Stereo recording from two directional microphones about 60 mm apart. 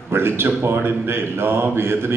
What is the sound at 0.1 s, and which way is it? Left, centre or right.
A man's voice, right.